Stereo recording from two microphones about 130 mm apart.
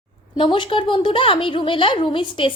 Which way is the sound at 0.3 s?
40° left (ahead or behind).